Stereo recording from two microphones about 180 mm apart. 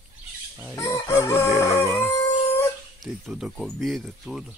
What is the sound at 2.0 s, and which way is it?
Howl, 15° left (ahead or behind).